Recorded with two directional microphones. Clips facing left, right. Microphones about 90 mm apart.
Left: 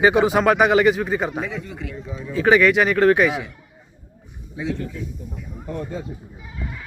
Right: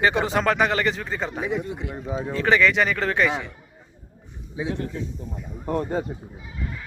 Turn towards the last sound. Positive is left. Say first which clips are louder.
# right 4 dB
turn(degrees=-55)  # may be behind; listen again after turning